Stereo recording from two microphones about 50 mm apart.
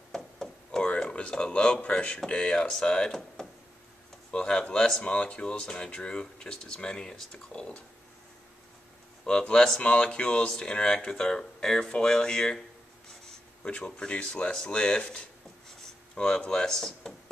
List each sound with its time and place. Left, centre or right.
0.1 s knock: centre
0.7 s a sound: centre
1.5 s speech: left
9.2 s speech: centre